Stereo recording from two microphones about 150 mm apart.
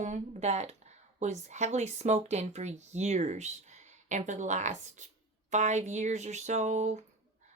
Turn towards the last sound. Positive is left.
turn(degrees=-50)  # may be behind; listen again after turning